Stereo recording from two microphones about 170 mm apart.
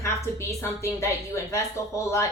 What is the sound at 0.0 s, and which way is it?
A woman's voice, 15° left (ahead or behind).